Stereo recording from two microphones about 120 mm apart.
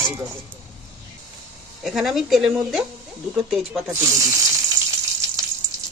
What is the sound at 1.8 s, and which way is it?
Speech, centre (ahead or behind).